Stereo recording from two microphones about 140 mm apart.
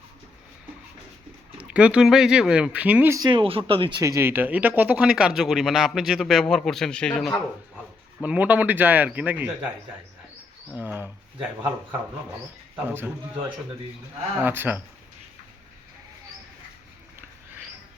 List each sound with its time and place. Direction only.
1.5 s speech: 10° right (ahead or behind)
3.2 s speech: 35° right (ahead or behind)
4.0 s speech: 20° right (ahead or behind); by 7.3 s 5° left (ahead or behind)
8.2 s speech: 10° right (ahead or behind)
10.8 s speech: 15° right (ahead or behind)
14.4 s speech: 15° right (ahead or behind)